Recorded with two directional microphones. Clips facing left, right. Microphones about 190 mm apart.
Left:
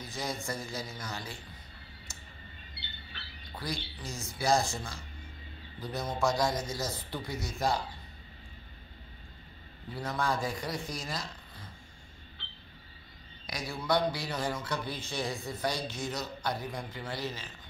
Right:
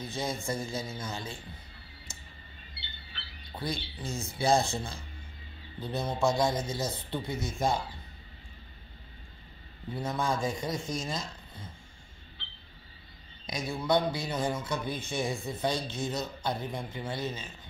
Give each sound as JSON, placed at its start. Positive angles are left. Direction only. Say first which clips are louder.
{"t": 0.0, "sound": "speech", "louder": "right 3 dB", "side_deg": -25}
{"t": 3.5, "sound": "speech", "louder": "right 3 dB", "side_deg": -25}
{"t": 9.9, "sound": "speech", "louder": "right 1 dB", "side_deg": -20}
{"t": 13.5, "sound": "a man's voice", "louder": "right 3 dB", "side_deg": -20}